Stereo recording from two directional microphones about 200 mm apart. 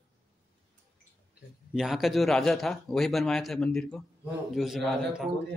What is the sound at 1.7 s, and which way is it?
A man's voice, centre (ahead or behind).